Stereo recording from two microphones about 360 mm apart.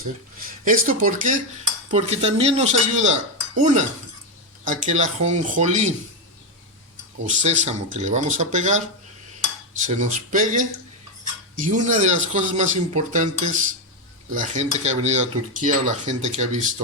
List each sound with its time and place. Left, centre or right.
0.0 s speech: right
7.3 s speech: centre
9.8 s speech: right